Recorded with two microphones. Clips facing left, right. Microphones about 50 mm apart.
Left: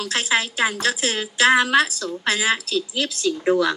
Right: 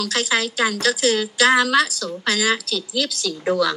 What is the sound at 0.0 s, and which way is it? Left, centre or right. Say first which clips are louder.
A woman's voice: right 1 dB; left.